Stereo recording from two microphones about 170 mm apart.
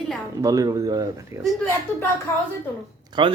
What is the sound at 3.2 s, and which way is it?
Speech, 30° right (ahead or behind).